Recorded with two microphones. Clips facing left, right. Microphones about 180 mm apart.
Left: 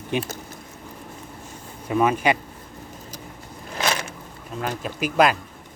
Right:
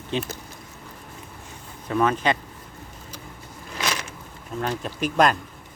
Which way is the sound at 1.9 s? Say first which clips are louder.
Left 2 dB; 10° left (ahead or behind).